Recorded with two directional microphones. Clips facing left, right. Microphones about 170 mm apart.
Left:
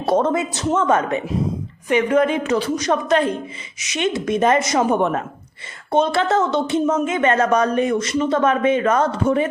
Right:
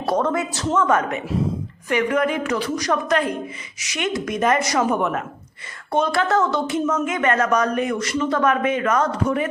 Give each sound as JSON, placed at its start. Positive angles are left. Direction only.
{"t": 0.0, "sound": "speech", "side_deg": 25}